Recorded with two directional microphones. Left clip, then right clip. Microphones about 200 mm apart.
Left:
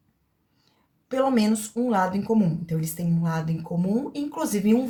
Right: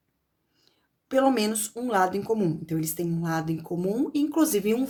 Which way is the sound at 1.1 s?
55° right (ahead or behind).